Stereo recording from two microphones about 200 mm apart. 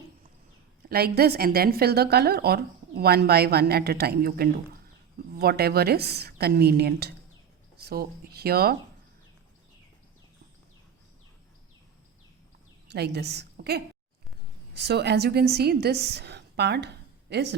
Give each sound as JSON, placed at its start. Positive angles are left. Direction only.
{"t": 0.9, "sound": "a woman's voice", "side_deg": -50}
{"t": 12.9, "sound": "a woman's voice", "side_deg": -55}